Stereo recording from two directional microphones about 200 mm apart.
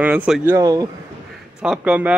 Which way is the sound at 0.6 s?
20° right (ahead or behind).